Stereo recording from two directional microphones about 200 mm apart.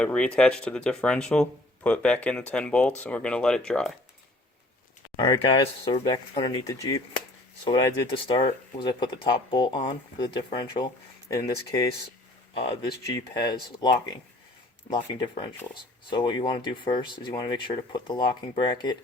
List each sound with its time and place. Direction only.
0.0 s speech: 5° left (ahead or behind)
5.1 s speech: 20° left (ahead or behind)
12.5 s speech: 25° left (ahead or behind)